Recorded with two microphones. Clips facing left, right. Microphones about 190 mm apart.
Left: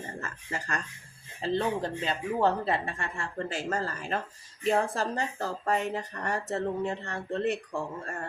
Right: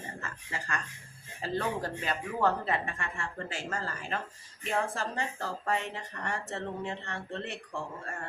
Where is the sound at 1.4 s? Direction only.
25° left (ahead or behind).